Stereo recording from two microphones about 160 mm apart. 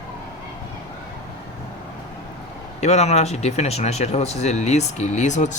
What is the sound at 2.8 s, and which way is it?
Speech, 45° left (ahead or behind).